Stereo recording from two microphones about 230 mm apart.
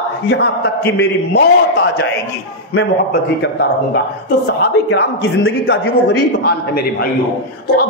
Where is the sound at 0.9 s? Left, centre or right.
Left.